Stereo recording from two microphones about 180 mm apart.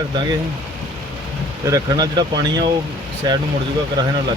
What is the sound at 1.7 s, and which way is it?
Speech, 20° right (ahead or behind).